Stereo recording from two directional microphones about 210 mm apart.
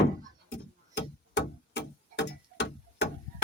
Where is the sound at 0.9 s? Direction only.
55° left (ahead or behind).